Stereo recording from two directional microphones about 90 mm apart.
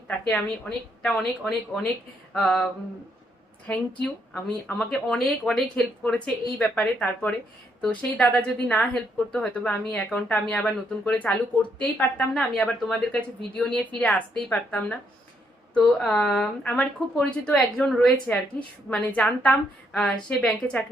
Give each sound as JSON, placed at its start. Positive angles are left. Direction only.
{"t": 0.3, "sound": "speech", "side_deg": 10}
{"t": 3.7, "sound": "speech", "side_deg": 5}